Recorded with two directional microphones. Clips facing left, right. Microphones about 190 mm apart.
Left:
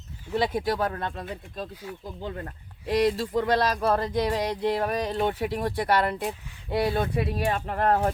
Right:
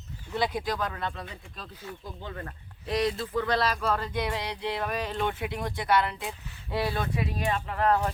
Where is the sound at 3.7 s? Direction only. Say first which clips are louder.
Left 5 dB; 40° left (ahead or behind).